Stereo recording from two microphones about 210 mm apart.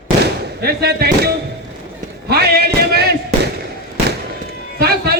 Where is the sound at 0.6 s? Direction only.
50° right (ahead or behind).